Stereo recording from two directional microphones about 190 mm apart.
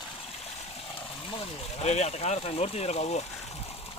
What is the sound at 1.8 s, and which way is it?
Speech, 35° left (ahead or behind).